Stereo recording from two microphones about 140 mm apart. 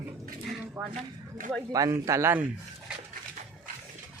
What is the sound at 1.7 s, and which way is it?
Speech, 25° right (ahead or behind).